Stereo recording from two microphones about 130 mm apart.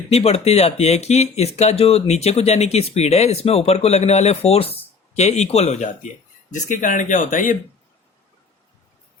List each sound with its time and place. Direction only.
0.1 s speech: 55° left (ahead or behind)
6.5 s speech: 80° left